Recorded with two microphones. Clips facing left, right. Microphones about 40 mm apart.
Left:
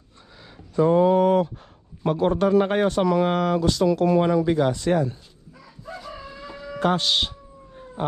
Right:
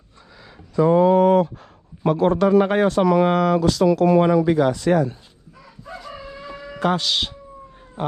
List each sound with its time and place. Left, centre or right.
0.9 s a sound: right
2.0 s speech: right
6.8 s speech: right